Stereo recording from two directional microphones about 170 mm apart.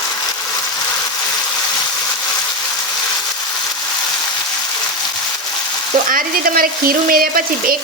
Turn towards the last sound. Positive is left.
turn(degrees=-60)  # may be behind; listen again after turning